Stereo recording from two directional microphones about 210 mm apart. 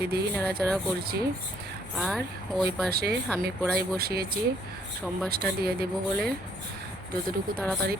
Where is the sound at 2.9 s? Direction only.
50° right (ahead or behind).